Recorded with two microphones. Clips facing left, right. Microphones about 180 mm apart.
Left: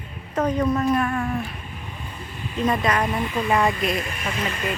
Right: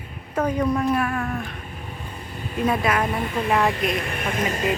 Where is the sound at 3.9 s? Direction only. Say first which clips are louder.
Right 2 dB; 60° right (ahead or behind).